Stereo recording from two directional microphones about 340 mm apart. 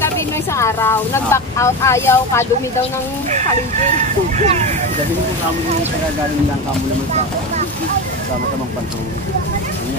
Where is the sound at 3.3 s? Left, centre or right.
Right.